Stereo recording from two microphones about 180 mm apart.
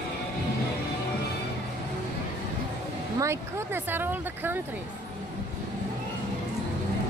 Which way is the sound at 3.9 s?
10° right (ahead or behind).